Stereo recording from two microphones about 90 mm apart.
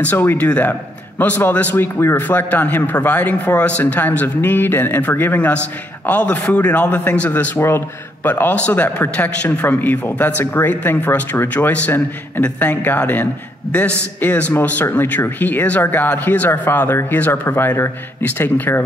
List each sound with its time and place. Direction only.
0.0 s a man's voice: 20° left (ahead or behind)